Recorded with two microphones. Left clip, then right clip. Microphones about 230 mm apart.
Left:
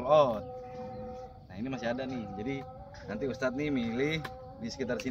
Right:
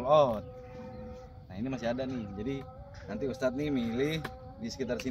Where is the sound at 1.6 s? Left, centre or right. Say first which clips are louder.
Right 1 dB; right.